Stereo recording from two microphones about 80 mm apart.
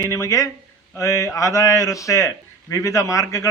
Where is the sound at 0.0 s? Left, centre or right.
Left.